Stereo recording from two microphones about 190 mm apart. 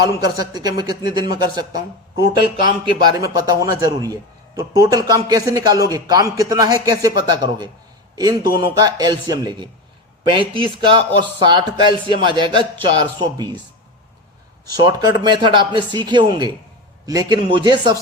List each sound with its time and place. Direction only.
0.3 s a man's voice: 20° right (ahead or behind)
2.8 s a man's voice: 20° right (ahead or behind)
14.8 s a man's voice: 20° right (ahead or behind)